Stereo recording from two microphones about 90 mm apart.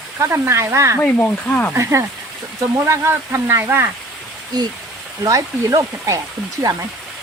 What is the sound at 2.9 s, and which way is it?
Speech, 30° right (ahead or behind).